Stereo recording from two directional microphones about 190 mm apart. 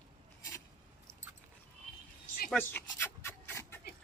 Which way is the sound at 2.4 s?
10° left (ahead or behind).